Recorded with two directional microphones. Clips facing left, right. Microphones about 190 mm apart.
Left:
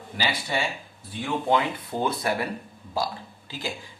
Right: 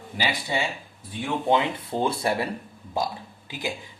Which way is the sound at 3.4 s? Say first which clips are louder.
Right 2 dB; 15° right (ahead or behind).